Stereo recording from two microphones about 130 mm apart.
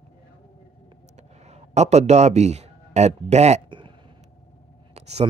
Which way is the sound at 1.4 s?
60° right (ahead or behind).